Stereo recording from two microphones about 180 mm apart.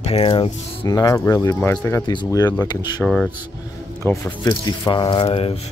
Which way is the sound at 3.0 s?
5° left (ahead or behind).